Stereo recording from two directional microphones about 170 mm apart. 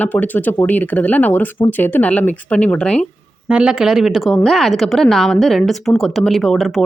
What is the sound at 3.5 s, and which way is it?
A woman's voice, 5° right (ahead or behind).